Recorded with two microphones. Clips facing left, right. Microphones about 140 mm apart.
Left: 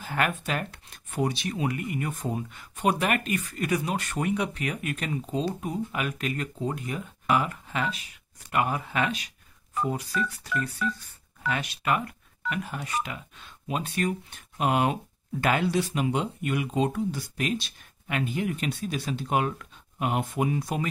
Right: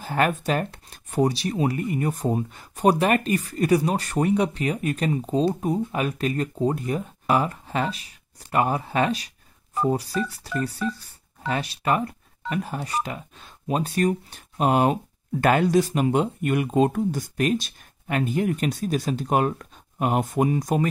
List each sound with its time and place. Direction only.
0.0 s speech: 35° right (ahead or behind)